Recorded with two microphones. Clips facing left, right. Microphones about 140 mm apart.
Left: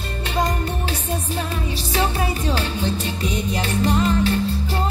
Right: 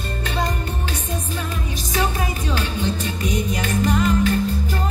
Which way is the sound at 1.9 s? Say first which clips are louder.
Left 1 dB; 35° left (ahead or behind).